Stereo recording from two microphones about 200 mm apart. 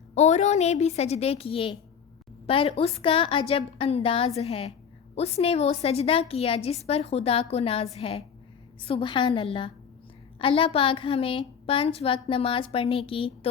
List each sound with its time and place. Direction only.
0.1 s a woman's voice: 35° left (ahead or behind)